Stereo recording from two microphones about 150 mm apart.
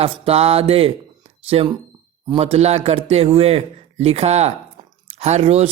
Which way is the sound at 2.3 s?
40° right (ahead or behind).